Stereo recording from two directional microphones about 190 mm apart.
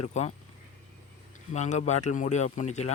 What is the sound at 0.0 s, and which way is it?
Speech, 35° left (ahead or behind).